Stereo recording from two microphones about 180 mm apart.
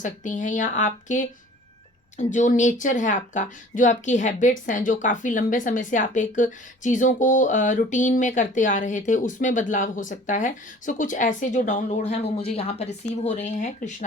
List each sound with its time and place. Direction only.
0.0 s a woman's voice: 45° left (ahead or behind)